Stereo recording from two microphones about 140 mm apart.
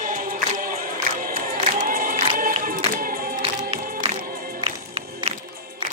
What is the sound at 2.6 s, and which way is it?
Choir, 85° right.